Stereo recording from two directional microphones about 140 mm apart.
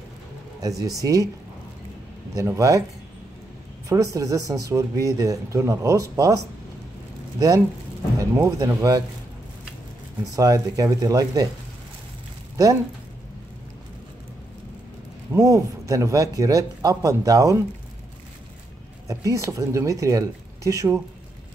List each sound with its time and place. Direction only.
0.6 s speech: 25° right (ahead or behind)
2.3 s speech: 20° right (ahead or behind)
3.9 s speech: 25° right (ahead or behind)
10.3 s speech: 25° right (ahead or behind)
15.4 s speech: 25° right (ahead or behind)
19.0 s speech: 20° right (ahead or behind)